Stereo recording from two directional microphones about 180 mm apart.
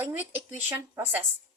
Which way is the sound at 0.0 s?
10° right (ahead or behind).